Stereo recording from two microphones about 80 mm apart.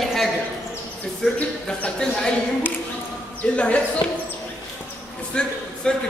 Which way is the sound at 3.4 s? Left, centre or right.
Centre.